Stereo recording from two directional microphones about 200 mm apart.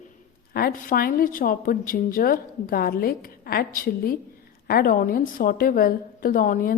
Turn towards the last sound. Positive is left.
turn(degrees=40)  # may be behind; listen again after turning